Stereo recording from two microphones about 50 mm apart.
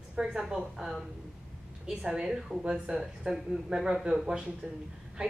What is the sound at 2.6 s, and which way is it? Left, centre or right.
Speech, centre.